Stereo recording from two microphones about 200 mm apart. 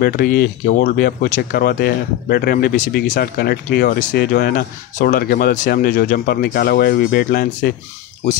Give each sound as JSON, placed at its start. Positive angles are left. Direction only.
{"t": 0.0, "sound": "speech", "side_deg": 50}